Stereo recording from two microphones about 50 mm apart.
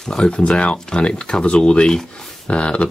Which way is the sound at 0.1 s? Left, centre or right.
Left.